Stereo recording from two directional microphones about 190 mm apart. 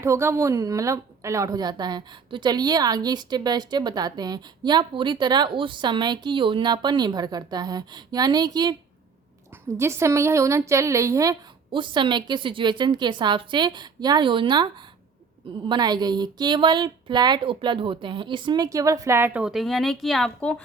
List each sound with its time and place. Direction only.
0.0 s a woman's voice: 15° right (ahead or behind); by 20.6 s 5° left (ahead or behind)